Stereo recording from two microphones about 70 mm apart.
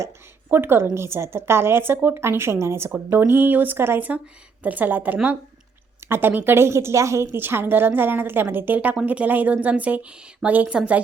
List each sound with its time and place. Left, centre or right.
0.5 s a woman's voice: right
7.3 s a woman's voice: right